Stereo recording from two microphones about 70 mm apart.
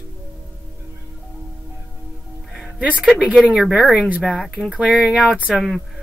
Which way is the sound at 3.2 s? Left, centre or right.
Centre.